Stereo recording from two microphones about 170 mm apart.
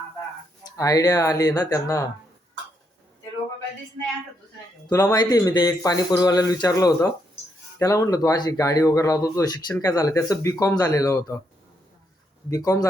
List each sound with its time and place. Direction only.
0.6 s speech: 20° left (ahead or behind)
4.9 s speech: 20° left (ahead or behind)
12.5 s speech: 20° left (ahead or behind)